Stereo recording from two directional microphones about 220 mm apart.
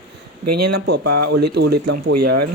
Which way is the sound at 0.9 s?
50° right (ahead or behind).